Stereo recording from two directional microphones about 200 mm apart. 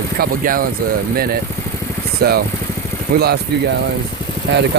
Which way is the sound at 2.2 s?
50° right (ahead or behind).